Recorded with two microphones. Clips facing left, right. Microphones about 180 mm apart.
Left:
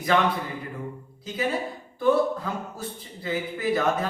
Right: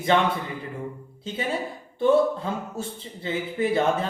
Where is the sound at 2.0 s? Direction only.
25° right (ahead or behind).